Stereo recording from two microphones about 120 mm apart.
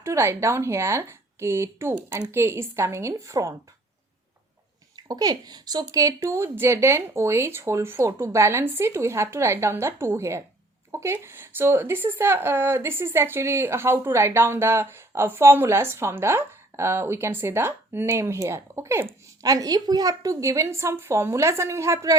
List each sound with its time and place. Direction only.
0.0 s speech: 25° right (ahead or behind)
4.9 s speech: 35° right (ahead or behind)